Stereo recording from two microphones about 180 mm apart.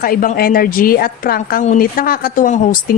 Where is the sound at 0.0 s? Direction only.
55° left (ahead or behind).